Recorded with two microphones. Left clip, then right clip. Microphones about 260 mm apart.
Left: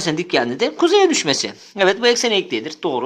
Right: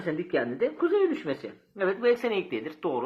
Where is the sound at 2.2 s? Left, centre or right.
Left.